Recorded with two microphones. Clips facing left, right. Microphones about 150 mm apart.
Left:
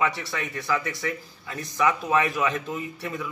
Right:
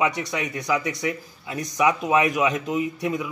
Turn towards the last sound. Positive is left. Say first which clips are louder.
# right 7 dB
turn(degrees=-15)  # may be behind; listen again after turning